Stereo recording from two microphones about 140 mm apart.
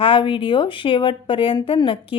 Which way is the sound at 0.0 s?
35° left (ahead or behind).